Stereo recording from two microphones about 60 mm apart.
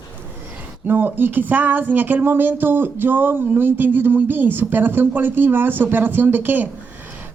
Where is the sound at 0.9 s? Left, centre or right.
Right.